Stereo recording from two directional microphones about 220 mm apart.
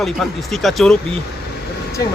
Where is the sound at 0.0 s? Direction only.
Centre (ahead or behind).